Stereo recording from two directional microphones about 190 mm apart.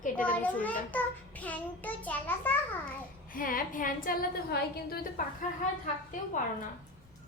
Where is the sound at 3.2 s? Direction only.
45° left (ahead or behind).